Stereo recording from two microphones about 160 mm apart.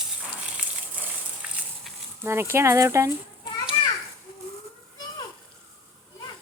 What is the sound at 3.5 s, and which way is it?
Children playing, 25° left (ahead or behind).